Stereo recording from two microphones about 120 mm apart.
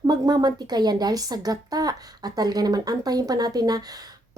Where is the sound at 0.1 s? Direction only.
35° right (ahead or behind).